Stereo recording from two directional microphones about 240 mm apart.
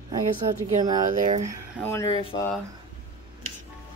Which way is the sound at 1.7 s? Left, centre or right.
Centre.